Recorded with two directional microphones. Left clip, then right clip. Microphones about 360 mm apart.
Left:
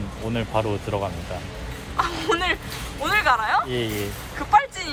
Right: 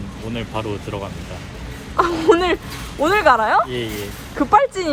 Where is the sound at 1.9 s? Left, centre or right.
Centre.